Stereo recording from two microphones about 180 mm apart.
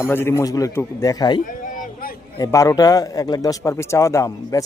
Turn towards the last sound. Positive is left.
turn(degrees=15)  # may be behind; listen again after turning